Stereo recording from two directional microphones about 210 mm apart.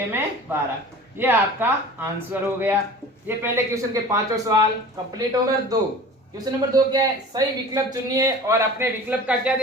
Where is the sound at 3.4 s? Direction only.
15° right (ahead or behind).